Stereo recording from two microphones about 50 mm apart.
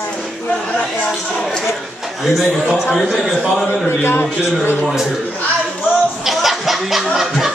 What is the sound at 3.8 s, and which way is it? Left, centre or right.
Speech, left.